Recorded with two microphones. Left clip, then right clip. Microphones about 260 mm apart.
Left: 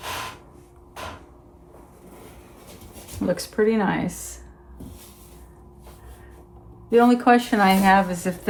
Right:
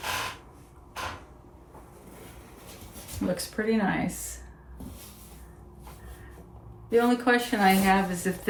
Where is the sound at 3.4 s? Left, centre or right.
Left.